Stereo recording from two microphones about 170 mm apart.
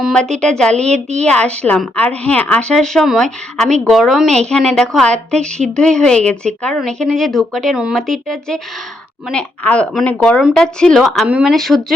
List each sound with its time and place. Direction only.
0.0 s a woman's voice: centre (ahead or behind)
0.9 s a woman's voice: 40° right (ahead or behind)
1.2 s a woman's voice: 5° left (ahead or behind)